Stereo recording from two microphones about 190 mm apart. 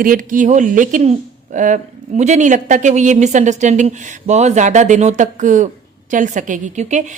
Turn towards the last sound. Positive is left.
turn(degrees=-40)  # may be behind; listen again after turning